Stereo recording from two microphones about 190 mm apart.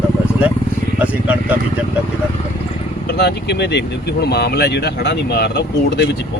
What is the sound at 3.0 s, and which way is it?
Speech, 60° left (ahead or behind).